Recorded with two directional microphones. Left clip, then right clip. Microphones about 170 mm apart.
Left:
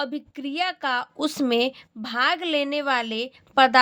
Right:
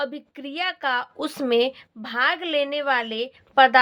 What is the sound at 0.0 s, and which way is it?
A woman's voice, 30° left (ahead or behind).